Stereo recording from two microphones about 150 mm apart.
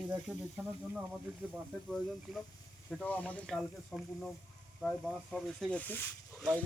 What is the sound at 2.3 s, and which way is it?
Speech, centre (ahead or behind).